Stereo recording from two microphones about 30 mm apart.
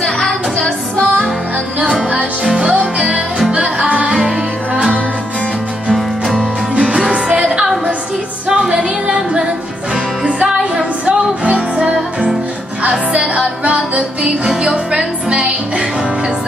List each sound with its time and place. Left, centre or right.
0.0 s music: left
0.7 s music: left
2.4 s music: right
2.8 s music: right
3.5 s music: right
6.7 s music: right
10.2 s music: right
13.7 s music: right